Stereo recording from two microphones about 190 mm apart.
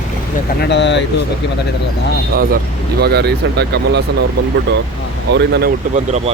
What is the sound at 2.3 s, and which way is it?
Speech, 50° right (ahead or behind).